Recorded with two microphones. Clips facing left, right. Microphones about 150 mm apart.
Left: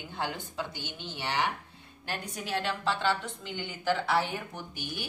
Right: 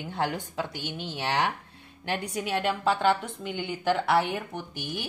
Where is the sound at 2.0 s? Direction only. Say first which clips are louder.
Right 7 dB; 70° right (ahead or behind).